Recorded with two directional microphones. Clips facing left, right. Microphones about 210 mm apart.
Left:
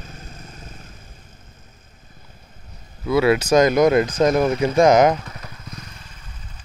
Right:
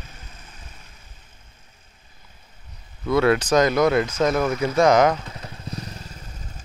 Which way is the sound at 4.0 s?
35° left (ahead or behind).